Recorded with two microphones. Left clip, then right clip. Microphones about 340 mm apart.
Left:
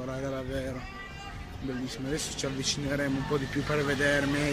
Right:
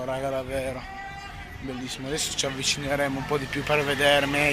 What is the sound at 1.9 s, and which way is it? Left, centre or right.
A man's voice, centre.